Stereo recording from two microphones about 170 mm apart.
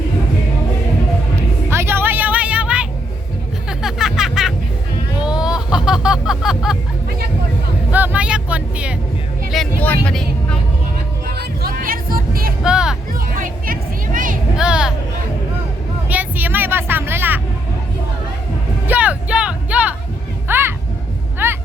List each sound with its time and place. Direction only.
1.7 s music: 15° right (ahead or behind)
7.9 s vehicle: 10° right (ahead or behind)
9.5 s vehicle: 5° left (ahead or behind)
11.3 s music: 60° right (ahead or behind)
12.6 s music: 5° right (ahead or behind)
13.1 s music: 55° right (ahead or behind)
14.5 s a sound: 5° right (ahead or behind)
16.0 s vehicle: 10° right (ahead or behind)
18.9 s music: 10° right (ahead or behind)
20.5 s a sound: 15° right (ahead or behind)